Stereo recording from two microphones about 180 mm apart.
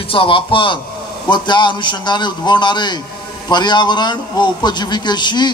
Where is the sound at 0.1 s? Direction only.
30° left (ahead or behind).